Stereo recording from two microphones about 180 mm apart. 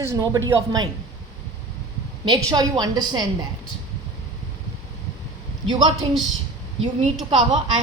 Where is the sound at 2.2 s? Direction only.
25° right (ahead or behind).